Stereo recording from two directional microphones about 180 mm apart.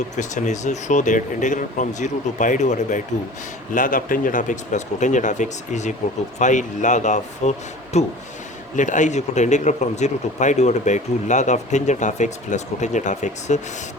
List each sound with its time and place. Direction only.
0.2 s speech: 40° left (ahead or behind)